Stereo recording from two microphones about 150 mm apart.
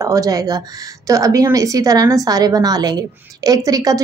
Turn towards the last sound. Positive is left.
turn(degrees=-25)  # may be behind; listen again after turning